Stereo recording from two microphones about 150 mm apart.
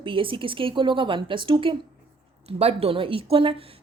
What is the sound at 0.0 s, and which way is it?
A woman's voice, 35° right (ahead or behind).